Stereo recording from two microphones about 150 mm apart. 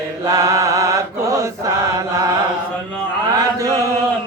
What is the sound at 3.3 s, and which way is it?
Mantra, 20° right (ahead or behind).